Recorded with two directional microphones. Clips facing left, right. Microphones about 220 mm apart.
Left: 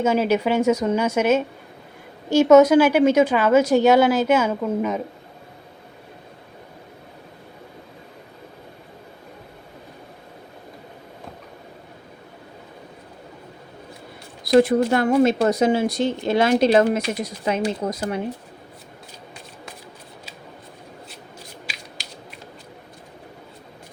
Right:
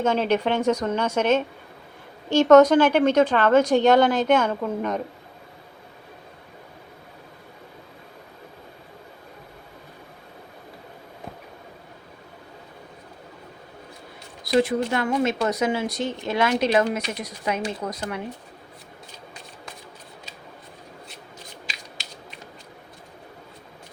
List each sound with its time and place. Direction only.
0.0 s a woman's voice: 5° left (ahead or behind)
14.4 s speech: 40° left (ahead or behind); by 18.2 s 25° left (ahead or behind)